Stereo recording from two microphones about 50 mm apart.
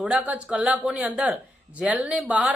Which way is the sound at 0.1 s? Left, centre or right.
Right.